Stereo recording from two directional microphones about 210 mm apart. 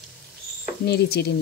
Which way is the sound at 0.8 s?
50° left (ahead or behind).